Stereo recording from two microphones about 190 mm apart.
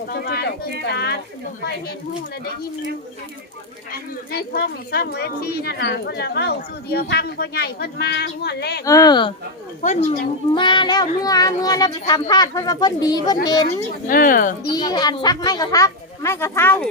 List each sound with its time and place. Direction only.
0.1 s speech: 60° left (ahead or behind)
4.3 s speech: 55° left (ahead or behind)
8.8 s speech: 20° left (ahead or behind)
9.8 s speech: 45° left (ahead or behind)
10.5 s speech: 25° left (ahead or behind)
14.1 s speech: 45° left (ahead or behind)
14.7 s speech: 20° left (ahead or behind)